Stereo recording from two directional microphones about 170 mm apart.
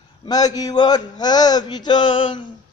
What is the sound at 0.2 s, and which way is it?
A man's voice, 25° left (ahead or behind).